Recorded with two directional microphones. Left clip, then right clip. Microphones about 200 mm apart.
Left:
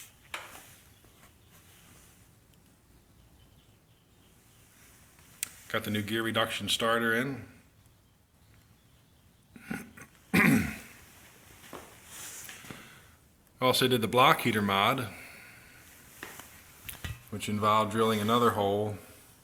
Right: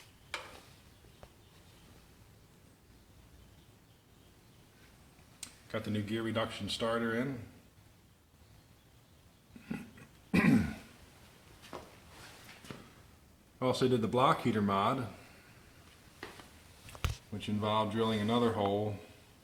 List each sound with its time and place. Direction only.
5.4 s speech: 10° left (ahead or behind)
10.3 s throat clearing: 10° left (ahead or behind)
13.6 s speech: 15° left (ahead or behind)
17.3 s speech: 20° left (ahead or behind)